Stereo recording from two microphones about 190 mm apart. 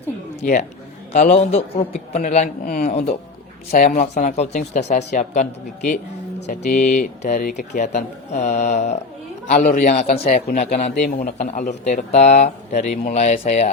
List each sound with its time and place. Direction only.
1.1 s speech: 35° left (ahead or behind)